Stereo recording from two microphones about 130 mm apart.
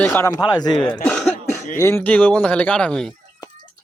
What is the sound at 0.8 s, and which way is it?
Speech, 10° left (ahead or behind).